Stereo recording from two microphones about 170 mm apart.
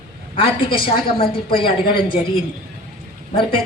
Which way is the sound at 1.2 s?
30° left (ahead or behind).